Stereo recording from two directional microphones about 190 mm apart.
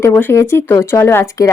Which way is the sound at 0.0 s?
10° left (ahead or behind).